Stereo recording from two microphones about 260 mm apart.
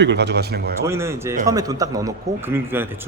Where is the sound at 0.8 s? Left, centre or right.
Centre.